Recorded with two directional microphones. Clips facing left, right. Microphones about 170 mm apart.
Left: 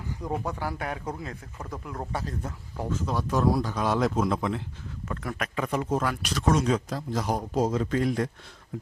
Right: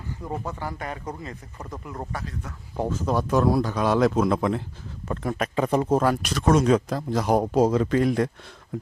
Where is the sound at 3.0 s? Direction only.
55° right (ahead or behind).